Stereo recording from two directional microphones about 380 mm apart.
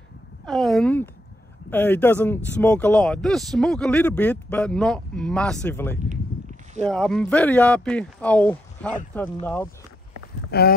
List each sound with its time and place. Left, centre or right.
0.5 s speech: centre
10.5 s speech: left